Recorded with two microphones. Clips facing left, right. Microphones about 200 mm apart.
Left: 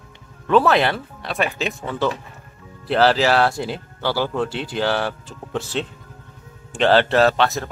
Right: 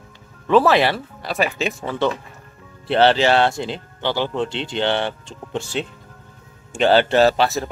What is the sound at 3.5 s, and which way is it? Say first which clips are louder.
Speech: even; 5° left (ahead or behind).